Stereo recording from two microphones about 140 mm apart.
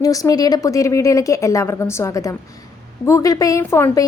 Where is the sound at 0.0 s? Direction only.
25° left (ahead or behind).